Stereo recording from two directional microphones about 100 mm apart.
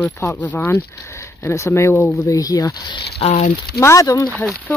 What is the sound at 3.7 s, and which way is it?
Speech, 30° left (ahead or behind).